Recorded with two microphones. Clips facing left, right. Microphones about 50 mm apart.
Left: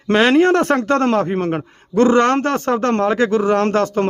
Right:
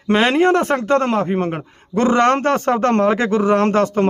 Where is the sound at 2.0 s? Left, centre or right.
Right.